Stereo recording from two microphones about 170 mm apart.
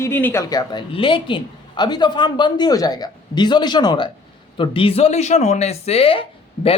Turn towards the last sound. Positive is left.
turn(degrees=35)  # may be behind; listen again after turning